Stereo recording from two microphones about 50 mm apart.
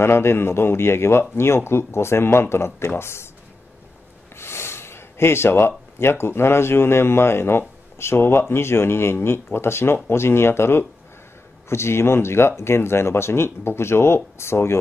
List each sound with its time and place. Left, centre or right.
0.0 s a man's voice: left
4.4 s gasp: left
5.9 s a man's voice: left